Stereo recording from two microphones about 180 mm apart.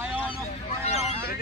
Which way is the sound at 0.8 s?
35° left (ahead or behind).